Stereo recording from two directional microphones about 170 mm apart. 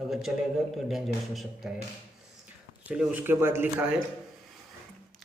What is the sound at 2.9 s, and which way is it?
Speech, 5° right (ahead or behind).